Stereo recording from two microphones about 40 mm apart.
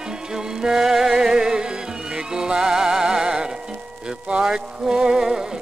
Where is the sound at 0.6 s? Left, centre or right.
Centre.